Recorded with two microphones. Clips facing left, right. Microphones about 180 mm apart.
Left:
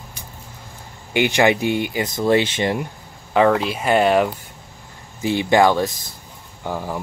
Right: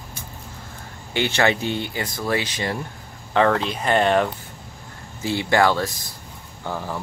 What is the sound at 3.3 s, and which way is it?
Speech, 10° left (ahead or behind).